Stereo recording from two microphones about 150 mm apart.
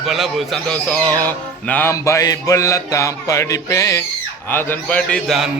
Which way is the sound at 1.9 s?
20° left (ahead or behind).